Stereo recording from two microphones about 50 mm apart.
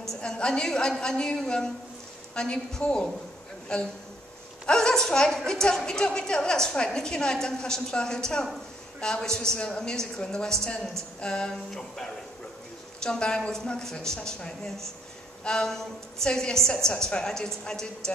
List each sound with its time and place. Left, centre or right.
0.2 s a woman's voice: centre